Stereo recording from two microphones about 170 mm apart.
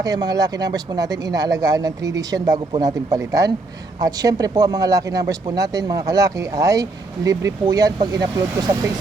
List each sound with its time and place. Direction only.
0.0 s speech: 20° right (ahead or behind)